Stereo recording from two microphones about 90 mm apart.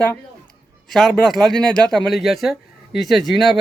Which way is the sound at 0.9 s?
Centre (ahead or behind).